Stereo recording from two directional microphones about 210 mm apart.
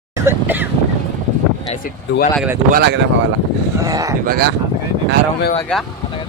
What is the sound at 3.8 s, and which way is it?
Speech, 15° right (ahead or behind).